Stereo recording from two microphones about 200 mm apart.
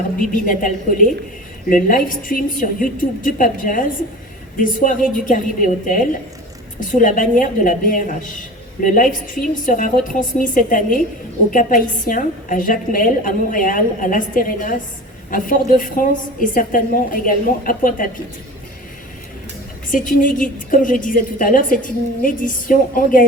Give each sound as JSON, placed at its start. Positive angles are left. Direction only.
{"t": 0.2, "sound": "a woman's voice", "side_deg": 40}
{"t": 19.9, "sound": "a woman's voice", "side_deg": 40}